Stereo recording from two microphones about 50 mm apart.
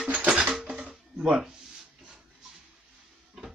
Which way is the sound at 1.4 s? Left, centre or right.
Centre.